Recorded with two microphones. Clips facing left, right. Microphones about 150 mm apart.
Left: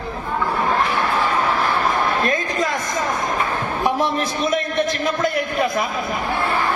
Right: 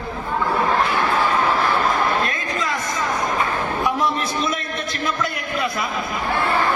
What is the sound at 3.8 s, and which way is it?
A man's voice, 45° left (ahead or behind).